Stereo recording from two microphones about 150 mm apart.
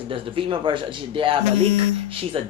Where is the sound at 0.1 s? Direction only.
35° right (ahead or behind).